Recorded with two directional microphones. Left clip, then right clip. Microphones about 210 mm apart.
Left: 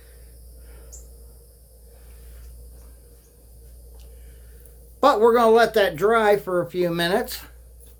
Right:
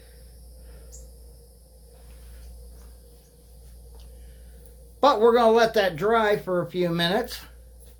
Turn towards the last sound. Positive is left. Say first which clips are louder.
# left 2 dB
turn(degrees=30)  # may be behind; listen again after turning